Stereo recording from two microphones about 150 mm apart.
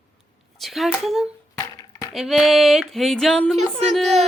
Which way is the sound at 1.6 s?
25° left (ahead or behind).